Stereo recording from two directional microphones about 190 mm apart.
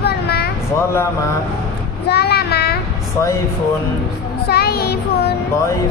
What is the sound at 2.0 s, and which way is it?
Child singing, 55° left (ahead or behind).